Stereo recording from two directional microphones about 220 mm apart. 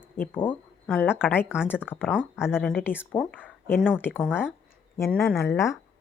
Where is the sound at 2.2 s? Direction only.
5° right (ahead or behind).